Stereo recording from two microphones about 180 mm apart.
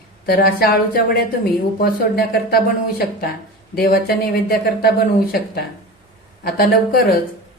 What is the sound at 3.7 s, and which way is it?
Speech, 55° left (ahead or behind).